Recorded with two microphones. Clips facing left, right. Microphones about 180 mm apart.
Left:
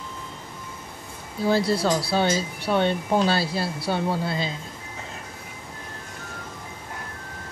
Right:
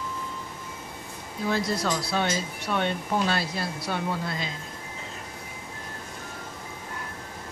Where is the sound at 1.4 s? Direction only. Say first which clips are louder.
Left 5 dB; 30° left (ahead or behind).